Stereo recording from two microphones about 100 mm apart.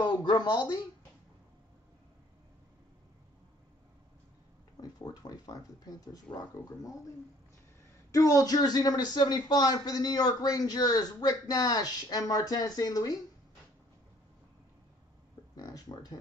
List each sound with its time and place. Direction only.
0.0 s speech: 50° left (ahead or behind)
4.7 s speech: 40° left (ahead or behind)
8.1 s a man's voice: 35° left (ahead or behind)
15.5 s speech: 40° left (ahead or behind)